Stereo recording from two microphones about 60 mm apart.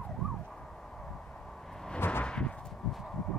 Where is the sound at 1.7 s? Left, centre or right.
Centre.